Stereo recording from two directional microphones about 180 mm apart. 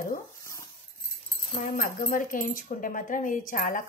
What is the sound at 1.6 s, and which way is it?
Speech, 50° left (ahead or behind).